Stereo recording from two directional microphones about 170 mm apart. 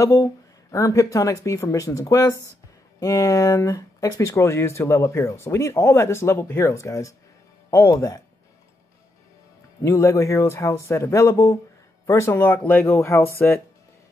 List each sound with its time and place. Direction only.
0.0 s speech: 20° left (ahead or behind)
9.8 s speech: 20° left (ahead or behind)